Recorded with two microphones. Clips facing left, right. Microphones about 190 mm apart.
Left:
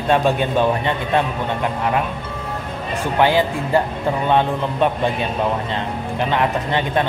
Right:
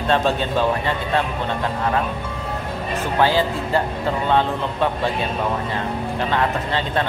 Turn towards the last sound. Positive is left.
turn(degrees=20)  # may be behind; listen again after turning